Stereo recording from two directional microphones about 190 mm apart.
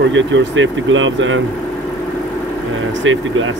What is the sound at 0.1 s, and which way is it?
Speech, 80° right.